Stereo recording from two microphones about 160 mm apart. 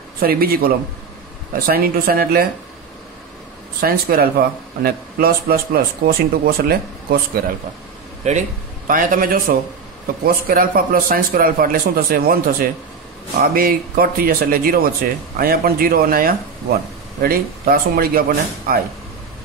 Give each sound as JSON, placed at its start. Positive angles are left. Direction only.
{"t": 0.2, "sound": "a man's voice", "side_deg": -70}
{"t": 3.8, "sound": "a man's voice", "side_deg": -70}
{"t": 8.2, "sound": "a man's voice", "side_deg": -45}
{"t": 13.4, "sound": "a man's voice", "side_deg": -65}